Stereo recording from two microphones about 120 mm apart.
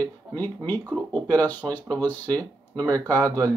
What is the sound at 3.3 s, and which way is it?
Speech, 30° right (ahead or behind).